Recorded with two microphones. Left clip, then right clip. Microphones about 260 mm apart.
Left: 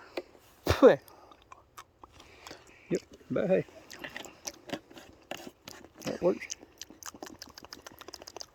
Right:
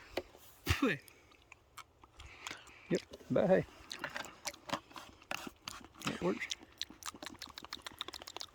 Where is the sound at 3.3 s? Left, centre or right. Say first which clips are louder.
Left 2 dB; right.